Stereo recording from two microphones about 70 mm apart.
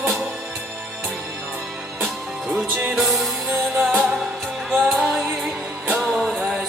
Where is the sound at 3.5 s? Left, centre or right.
Right.